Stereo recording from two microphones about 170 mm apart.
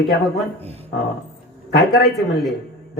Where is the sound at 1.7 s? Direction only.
75° left (ahead or behind).